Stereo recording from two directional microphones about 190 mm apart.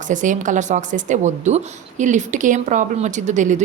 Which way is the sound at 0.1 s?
40° right (ahead or behind).